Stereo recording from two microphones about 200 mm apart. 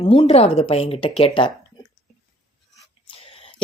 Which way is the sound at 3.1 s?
30° left (ahead or behind).